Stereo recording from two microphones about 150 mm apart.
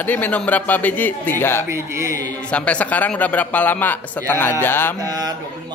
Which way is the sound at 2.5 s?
10° left (ahead or behind).